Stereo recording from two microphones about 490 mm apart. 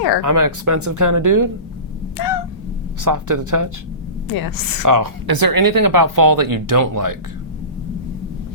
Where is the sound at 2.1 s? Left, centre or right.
Left.